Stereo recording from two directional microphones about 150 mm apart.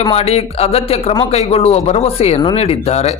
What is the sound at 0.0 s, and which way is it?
A man's voice, 40° left (ahead or behind).